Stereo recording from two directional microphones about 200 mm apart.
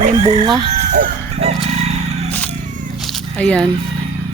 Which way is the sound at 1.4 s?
30° right (ahead or behind).